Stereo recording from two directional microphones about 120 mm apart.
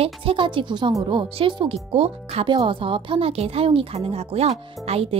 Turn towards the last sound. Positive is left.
turn(degrees=-55)  # may be behind; listen again after turning